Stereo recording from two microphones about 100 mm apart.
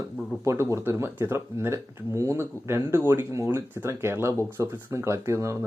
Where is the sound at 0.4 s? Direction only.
30° right (ahead or behind).